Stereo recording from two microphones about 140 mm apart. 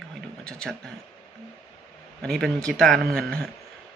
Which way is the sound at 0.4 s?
5° left (ahead or behind).